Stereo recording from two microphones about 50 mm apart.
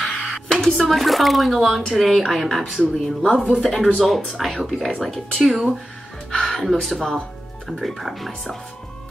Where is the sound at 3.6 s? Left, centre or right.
Centre.